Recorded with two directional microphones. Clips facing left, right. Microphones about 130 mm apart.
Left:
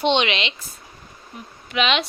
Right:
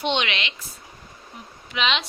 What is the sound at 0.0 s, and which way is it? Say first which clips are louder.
Speech: left 5 dB; 25° left (ahead or behind).